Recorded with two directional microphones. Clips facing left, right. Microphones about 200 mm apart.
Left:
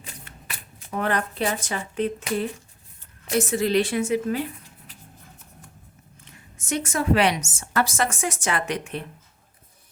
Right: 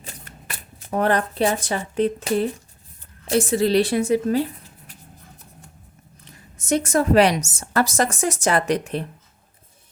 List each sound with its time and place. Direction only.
0.9 s a woman's voice: 35° right (ahead or behind)
6.2 s a woman's voice: 40° right (ahead or behind)